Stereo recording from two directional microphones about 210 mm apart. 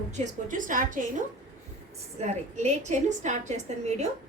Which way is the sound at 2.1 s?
35° right (ahead or behind).